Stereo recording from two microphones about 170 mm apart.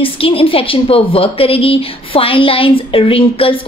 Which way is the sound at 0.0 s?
35° left (ahead or behind).